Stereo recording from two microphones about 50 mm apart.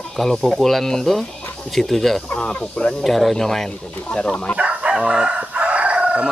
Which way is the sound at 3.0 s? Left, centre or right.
Centre.